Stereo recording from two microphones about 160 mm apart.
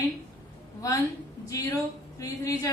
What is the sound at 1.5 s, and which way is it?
Speech, 20° left (ahead or behind).